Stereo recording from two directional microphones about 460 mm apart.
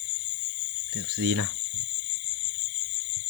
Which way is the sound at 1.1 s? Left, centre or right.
Right.